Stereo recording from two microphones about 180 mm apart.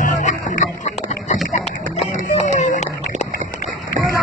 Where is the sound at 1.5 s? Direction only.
40° left (ahead or behind).